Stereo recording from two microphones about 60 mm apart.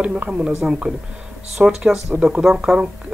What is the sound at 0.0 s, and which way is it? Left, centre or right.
Speech, centre.